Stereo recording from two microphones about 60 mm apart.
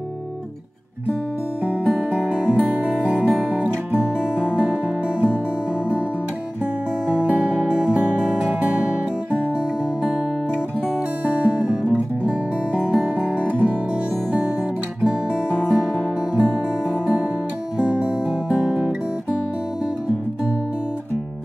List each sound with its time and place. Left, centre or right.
1.6 s music: centre
7.2 s music: right
11.2 s music: right
15.0 s music: centre